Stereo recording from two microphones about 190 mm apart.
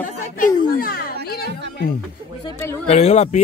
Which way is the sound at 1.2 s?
55° left (ahead or behind).